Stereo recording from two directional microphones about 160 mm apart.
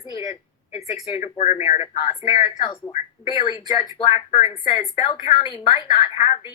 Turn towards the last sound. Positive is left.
turn(degrees=35)  # may be behind; listen again after turning